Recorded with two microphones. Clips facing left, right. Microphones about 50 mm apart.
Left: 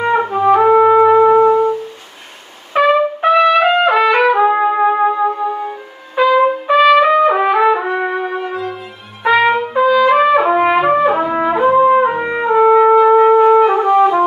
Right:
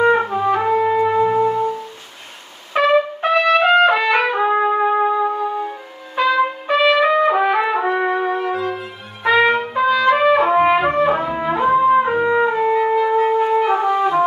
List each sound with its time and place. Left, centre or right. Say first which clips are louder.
0.0 s music: left 2 dB; centre
2.7 s trumpet: left 3 dB; centre
5.6 s music: left 2 dB; centre
6.7 s trumpet: left 5 dB; centre